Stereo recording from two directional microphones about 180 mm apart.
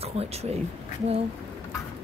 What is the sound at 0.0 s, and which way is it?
Speech, 35° right (ahead or behind).